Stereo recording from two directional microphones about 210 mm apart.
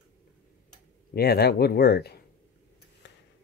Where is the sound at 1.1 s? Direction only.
50° left (ahead or behind).